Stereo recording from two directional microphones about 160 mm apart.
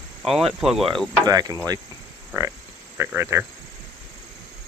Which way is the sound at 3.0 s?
15° right (ahead or behind).